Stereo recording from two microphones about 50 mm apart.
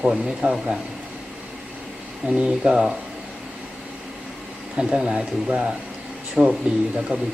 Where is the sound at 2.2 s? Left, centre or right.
Right.